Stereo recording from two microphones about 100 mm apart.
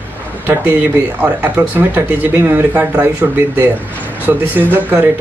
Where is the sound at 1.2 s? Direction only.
15° right (ahead or behind).